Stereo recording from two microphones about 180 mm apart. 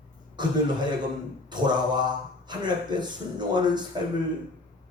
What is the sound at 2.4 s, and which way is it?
Speech, 25° right (ahead or behind).